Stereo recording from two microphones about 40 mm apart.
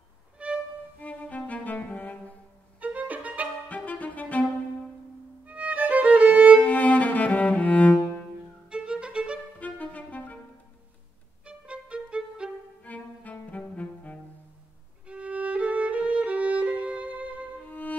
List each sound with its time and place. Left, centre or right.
0.4 s violin: right
0.9 s music: left
2.8 s violin: right
3.6 s music: left
5.5 s music: right
6.6 s cello: left
8.6 s violin: right
9.6 s clarinet: left
11.4 s violin: right
12.8 s cello: left
15.0 s violin: right
17.6 s music: left